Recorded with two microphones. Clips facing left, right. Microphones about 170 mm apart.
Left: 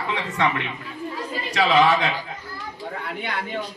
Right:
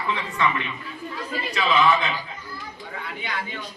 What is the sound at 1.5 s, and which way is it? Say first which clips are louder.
Speech: left 3 dB; 80° left.